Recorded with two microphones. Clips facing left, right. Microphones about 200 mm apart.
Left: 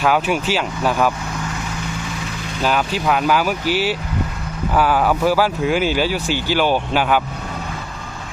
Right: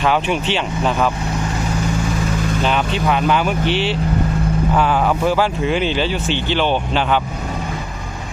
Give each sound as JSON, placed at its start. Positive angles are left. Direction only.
{"t": 0.0, "sound": "speech", "side_deg": 5}
{"t": 2.6, "sound": "speech", "side_deg": 5}